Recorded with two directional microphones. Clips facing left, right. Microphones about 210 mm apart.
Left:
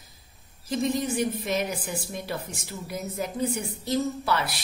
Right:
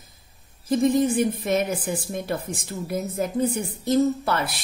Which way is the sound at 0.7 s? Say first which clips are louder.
Right 7 dB; 50° right (ahead or behind).